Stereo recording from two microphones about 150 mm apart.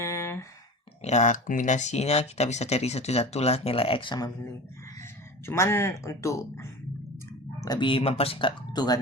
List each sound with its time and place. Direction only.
0.0 s a sound: 20° left (ahead or behind)
1.0 s speech: 50° left (ahead or behind); by 4.3 s 30° left (ahead or behind)
5.5 s speech: 15° left (ahead or behind)